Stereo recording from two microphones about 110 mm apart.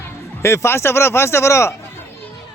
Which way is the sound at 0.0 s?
25° left (ahead or behind).